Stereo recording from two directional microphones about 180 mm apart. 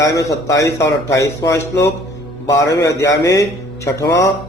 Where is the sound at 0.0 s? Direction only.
20° left (ahead or behind).